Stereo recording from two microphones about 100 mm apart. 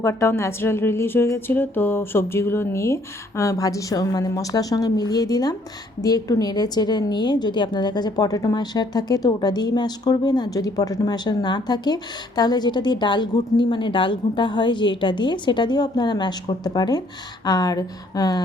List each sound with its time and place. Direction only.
0.0 s a woman's voice: 25° left (ahead or behind)